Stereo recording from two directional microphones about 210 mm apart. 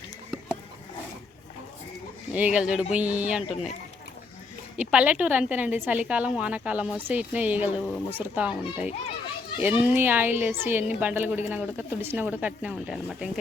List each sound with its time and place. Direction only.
2.3 s speech: 5° right (ahead or behind)
4.8 s a woman's voice: 5° right (ahead or behind)